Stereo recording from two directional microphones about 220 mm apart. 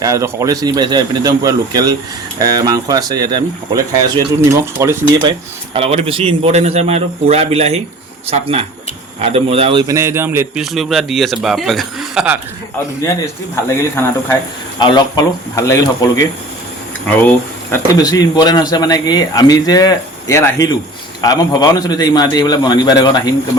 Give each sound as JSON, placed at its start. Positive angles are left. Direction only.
{"t": 0.0, "sound": "speech", "side_deg": -15}
{"t": 5.7, "sound": "a man's voice", "side_deg": -30}
{"t": 13.7, "sound": "speech", "side_deg": 10}
{"t": 17.7, "sound": "speech", "side_deg": 15}